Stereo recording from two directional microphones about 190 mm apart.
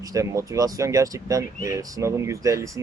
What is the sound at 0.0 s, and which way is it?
Speech, 15° right (ahead or behind).